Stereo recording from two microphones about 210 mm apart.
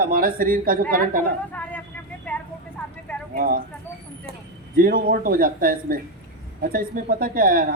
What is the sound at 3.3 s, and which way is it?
Speech, 45° right (ahead or behind).